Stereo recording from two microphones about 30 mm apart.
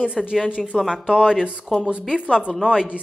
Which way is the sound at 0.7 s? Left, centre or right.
Centre.